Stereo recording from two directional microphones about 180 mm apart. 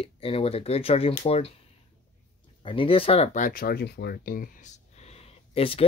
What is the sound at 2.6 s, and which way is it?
Speech, 30° left (ahead or behind).